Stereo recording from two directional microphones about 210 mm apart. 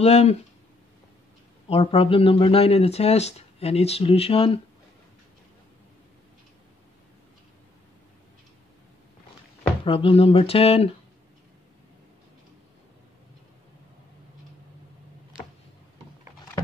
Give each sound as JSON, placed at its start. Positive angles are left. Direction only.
{"t": 0.0, "sound": "speech", "side_deg": 30}
{"t": 1.7, "sound": "speech", "side_deg": 25}
{"t": 9.6, "sound": "speech", "side_deg": 25}